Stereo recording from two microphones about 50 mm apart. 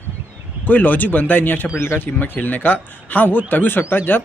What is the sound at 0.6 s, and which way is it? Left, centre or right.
A man's voice, left.